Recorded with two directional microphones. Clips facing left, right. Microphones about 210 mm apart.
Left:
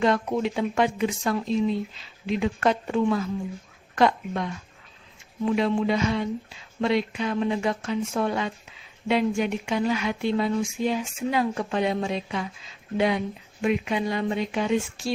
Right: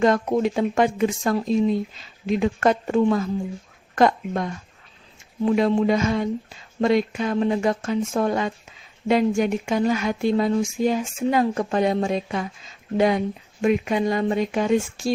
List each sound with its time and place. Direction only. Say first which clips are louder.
0.0 s speech: right 4 dB; 45° right (ahead or behind)